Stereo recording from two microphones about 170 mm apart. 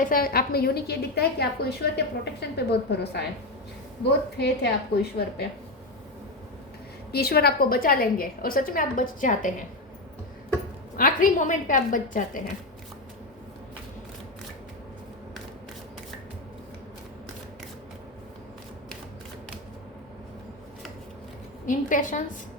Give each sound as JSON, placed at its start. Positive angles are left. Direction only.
{"t": 0.0, "sound": "a woman's voice", "side_deg": 55}
{"t": 4.4, "sound": "a woman's voice", "side_deg": 75}
{"t": 7.1, "sound": "a woman's voice", "side_deg": 65}
{"t": 10.9, "sound": "a woman's voice", "side_deg": 55}
{"t": 21.7, "sound": "a woman's voice", "side_deg": 50}